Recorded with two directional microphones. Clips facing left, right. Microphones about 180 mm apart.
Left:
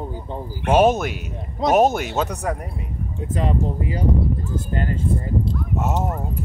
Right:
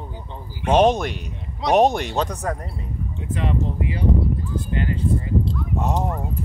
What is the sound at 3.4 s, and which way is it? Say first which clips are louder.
Speech: left 2 dB; 40° left (ahead or behind).